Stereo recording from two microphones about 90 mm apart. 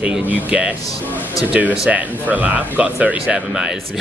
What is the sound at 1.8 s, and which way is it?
Speech, 15° right (ahead or behind).